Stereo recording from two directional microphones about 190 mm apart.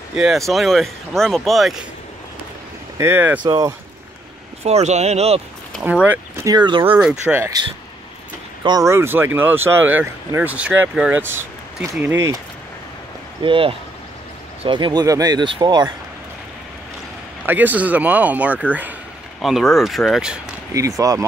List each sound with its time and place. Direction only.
0.1 s speech: centre (ahead or behind)
3.0 s speech: 10° right (ahead or behind)
4.6 s speech: 35° right (ahead or behind)
5.8 s speech: 10° right (ahead or behind)
6.3 s speech: 20° right (ahead or behind)
6.8 s speech: 5° right (ahead or behind)
8.6 s speech: 20° right (ahead or behind)
13.4 s speech: 25° right (ahead or behind)
17.5 s speech: 10° right (ahead or behind)
20.7 s speech: 15° right (ahead or behind)